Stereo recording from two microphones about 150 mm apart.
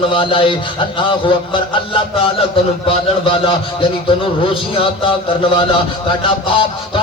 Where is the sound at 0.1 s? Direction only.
35° left (ahead or behind).